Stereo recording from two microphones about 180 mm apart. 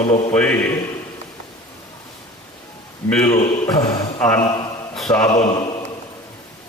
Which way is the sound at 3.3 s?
20° left (ahead or behind).